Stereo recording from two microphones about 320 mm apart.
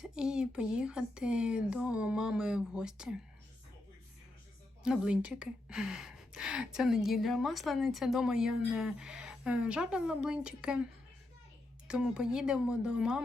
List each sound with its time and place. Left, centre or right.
0.0 s speech: centre
4.8 s a woman's voice: centre
11.9 s a woman's voice: centre